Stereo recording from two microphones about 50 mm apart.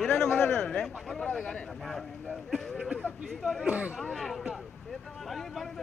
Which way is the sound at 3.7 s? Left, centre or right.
Right.